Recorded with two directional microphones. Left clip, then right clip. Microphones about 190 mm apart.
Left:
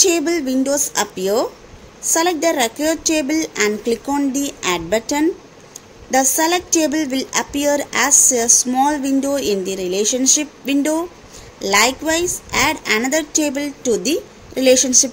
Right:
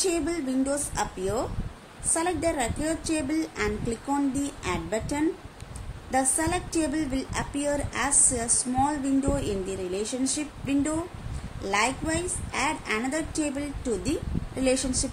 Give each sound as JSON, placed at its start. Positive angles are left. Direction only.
{"t": 0.0, "sound": "a woman's voice", "side_deg": 40}